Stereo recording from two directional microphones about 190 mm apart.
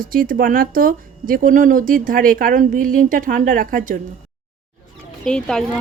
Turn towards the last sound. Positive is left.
turn(degrees=5)  # may be behind; listen again after turning